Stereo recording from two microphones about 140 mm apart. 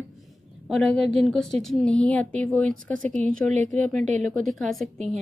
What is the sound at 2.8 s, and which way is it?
Speech, 65° right (ahead or behind).